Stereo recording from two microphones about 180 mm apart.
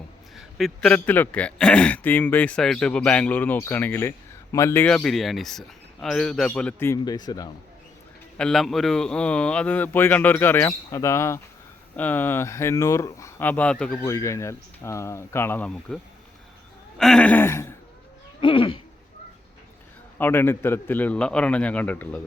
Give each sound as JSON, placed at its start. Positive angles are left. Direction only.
{"t": 0.3, "sound": "speech", "side_deg": 0}
{"t": 8.4, "sound": "speech", "side_deg": 5}
{"t": 17.0, "sound": "speech", "side_deg": 5}
{"t": 18.3, "sound": "a sound", "side_deg": 30}
{"t": 20.1, "sound": "speech", "side_deg": 10}